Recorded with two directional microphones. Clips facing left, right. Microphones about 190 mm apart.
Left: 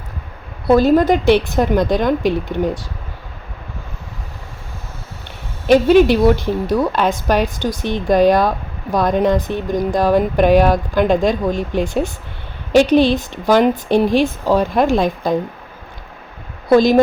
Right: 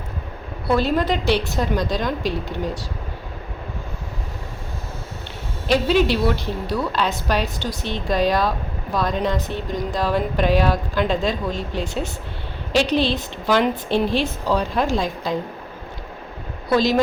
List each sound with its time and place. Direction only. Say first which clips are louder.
0.7 s a woman's voice: left 8 dB; 45° left (ahead or behind)
5.6 s a woman's voice: left 8 dB; 50° left (ahead or behind)
16.6 s a woman's voice: left 7 dB; 50° left (ahead or behind)